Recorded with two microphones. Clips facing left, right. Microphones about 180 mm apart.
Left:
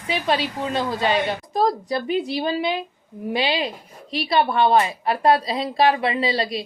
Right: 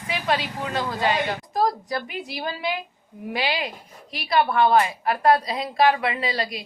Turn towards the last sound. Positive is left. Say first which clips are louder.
# left 5 dB
turn(degrees=25)  # may be behind; listen again after turning